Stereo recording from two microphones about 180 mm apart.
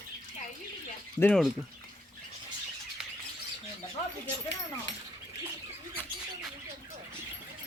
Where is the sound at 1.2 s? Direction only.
5° left (ahead or behind).